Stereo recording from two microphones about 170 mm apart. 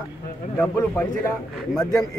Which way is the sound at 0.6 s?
10° left (ahead or behind).